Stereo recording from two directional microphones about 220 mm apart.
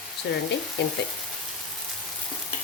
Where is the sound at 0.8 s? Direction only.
50° left (ahead or behind).